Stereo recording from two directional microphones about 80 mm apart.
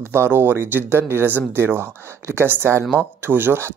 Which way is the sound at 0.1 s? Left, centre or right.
Right.